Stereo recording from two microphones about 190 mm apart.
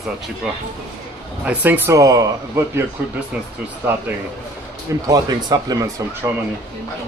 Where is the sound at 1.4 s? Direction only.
10° right (ahead or behind).